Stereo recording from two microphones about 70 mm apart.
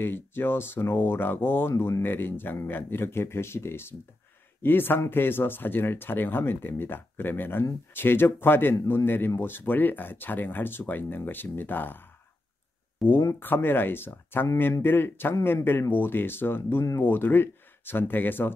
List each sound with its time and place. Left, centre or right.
0.0 s speech: left
13.1 s speech: left
13.4 s speech: left